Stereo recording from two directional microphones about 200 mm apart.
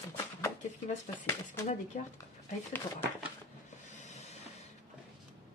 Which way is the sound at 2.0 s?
40° left (ahead or behind).